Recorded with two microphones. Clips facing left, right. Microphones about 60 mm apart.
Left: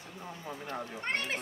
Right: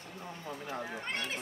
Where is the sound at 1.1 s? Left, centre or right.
Left.